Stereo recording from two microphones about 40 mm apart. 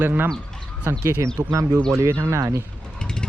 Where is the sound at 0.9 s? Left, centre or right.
Right.